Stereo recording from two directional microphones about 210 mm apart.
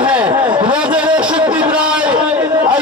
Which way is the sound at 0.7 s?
5° right (ahead or behind).